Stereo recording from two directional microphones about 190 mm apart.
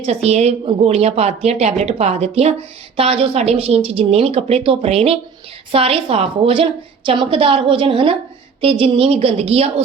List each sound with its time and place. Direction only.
0.0 s a woman's voice: 35° right (ahead or behind)